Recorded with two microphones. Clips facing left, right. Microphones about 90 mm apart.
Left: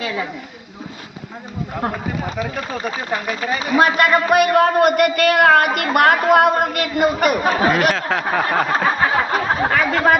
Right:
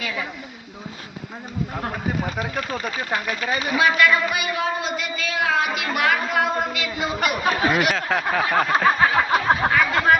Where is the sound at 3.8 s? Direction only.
45° left (ahead or behind).